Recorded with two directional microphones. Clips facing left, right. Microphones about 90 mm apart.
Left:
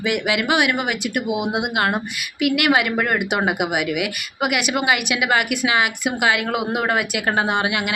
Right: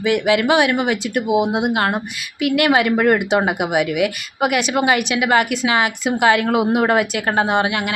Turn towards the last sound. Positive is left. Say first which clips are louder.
# right 3 dB
turn(degrees=-30)  # may be behind; listen again after turning